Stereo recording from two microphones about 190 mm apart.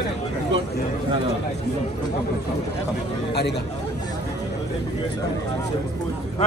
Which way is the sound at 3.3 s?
60° left (ahead or behind).